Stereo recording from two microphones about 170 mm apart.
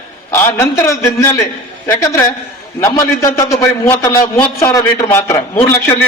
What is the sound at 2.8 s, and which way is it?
A man's voice, 20° left (ahead or behind).